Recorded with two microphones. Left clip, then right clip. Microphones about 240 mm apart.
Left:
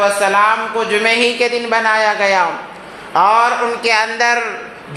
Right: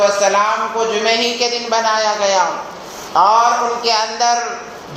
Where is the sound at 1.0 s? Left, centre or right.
Left.